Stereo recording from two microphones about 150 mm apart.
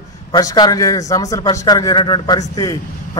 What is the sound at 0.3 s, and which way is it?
A man's voice, 25° left (ahead or behind).